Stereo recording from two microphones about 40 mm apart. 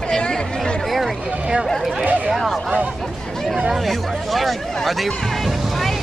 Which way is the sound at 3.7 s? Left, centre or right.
Centre.